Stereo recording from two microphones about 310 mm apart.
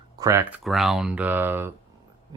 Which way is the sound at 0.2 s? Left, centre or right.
Centre.